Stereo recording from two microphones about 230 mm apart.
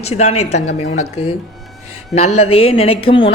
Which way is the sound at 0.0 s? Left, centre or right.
Left.